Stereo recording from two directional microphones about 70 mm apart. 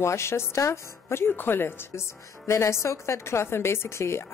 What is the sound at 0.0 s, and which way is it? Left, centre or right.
A woman's voice, left.